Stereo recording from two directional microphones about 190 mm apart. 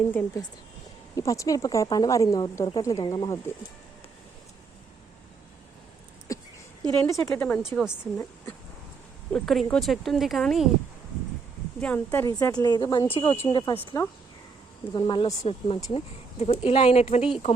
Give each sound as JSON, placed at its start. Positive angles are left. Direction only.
{"t": 0.1, "sound": "speech", "side_deg": 10}
{"t": 6.3, "sound": "a sound", "side_deg": 15}
{"t": 7.0, "sound": "speech", "side_deg": 10}
{"t": 9.3, "sound": "speech", "side_deg": 5}
{"t": 11.8, "sound": "speech", "side_deg": 10}
{"t": 14.9, "sound": "speech", "side_deg": 25}